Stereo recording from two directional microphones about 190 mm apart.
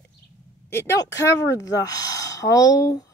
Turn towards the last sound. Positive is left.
turn(degrees=20)  # may be behind; listen again after turning